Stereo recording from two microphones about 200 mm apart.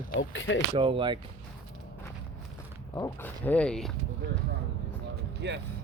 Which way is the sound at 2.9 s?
15° left (ahead or behind).